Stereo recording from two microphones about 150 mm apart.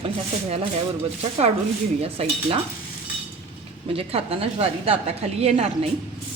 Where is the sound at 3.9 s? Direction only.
40° right (ahead or behind).